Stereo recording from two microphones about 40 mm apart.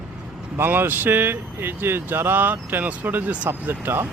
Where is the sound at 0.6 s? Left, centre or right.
Right.